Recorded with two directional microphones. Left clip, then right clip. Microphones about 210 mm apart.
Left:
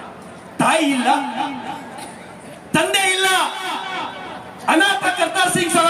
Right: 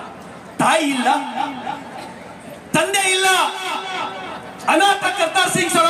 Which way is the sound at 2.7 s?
20° right (ahead or behind).